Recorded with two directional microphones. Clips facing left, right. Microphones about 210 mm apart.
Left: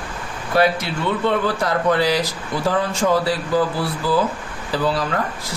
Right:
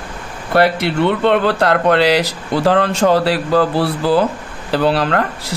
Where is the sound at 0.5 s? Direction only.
65° right (ahead or behind).